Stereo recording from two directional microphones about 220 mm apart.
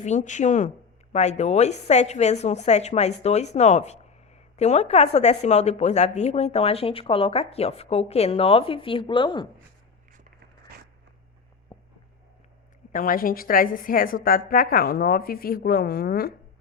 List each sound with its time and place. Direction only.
0.0 s a woman's voice: 35° left (ahead or behind)
11.7 s a sound: 20° left (ahead or behind)
12.9 s a woman's voice: 40° left (ahead or behind)